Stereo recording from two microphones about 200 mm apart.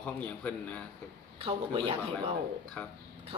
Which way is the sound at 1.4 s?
25° right (ahead or behind).